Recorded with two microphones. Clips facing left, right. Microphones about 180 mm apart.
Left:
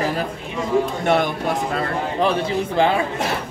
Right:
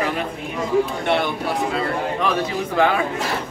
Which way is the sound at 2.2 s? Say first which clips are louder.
Left 6 dB; 30° left (ahead or behind).